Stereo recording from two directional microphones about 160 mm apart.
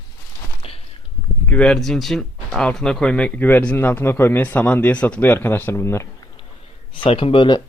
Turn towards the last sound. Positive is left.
turn(degrees=30)  # may be behind; listen again after turning